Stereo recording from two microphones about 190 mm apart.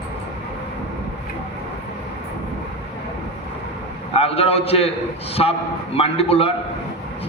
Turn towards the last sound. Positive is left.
turn(degrees=30)  # may be behind; listen again after turning